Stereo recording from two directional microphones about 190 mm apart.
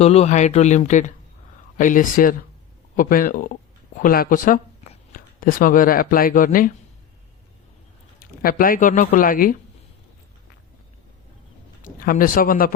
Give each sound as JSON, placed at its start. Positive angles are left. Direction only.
{"t": 0.0, "sound": "speech", "side_deg": 35}
{"t": 8.4, "sound": "speech", "side_deg": 50}
{"t": 11.8, "sound": "speech", "side_deg": 45}